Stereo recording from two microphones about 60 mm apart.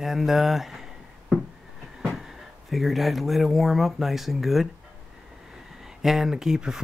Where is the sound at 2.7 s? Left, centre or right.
Centre.